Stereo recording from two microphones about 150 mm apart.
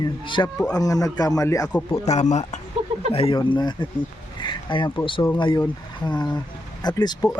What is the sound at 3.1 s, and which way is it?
Speech, 40° left (ahead or behind).